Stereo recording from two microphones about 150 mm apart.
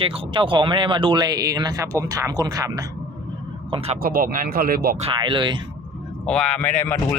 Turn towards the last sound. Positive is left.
turn(degrees=10)  # may be behind; listen again after turning